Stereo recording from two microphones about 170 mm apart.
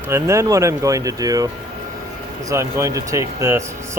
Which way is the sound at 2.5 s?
15° right (ahead or behind).